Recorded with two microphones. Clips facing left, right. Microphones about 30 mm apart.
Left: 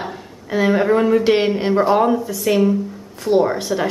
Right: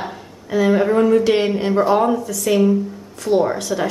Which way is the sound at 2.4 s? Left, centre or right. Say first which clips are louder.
Right 1 dB; centre.